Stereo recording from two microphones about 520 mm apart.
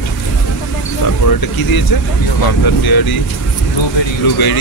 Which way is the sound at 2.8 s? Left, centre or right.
Left.